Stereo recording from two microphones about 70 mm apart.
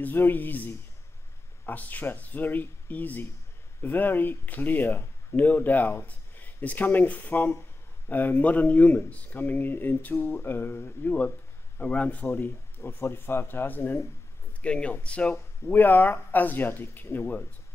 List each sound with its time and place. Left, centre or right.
0.0 s speech: left
14.6 s speech: centre
15.3 s speech: left